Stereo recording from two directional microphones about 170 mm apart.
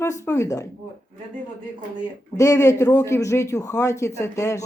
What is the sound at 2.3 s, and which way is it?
A man's voice, 20° left (ahead or behind).